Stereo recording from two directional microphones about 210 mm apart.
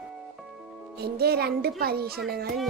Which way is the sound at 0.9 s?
50° right (ahead or behind).